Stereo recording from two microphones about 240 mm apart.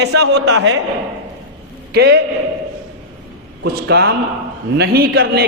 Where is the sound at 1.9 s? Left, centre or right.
Right.